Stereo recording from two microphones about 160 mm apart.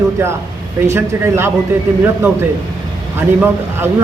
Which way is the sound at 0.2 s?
15° right (ahead or behind).